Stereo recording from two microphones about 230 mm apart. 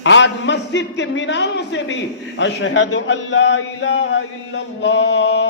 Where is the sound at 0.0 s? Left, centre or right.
Left.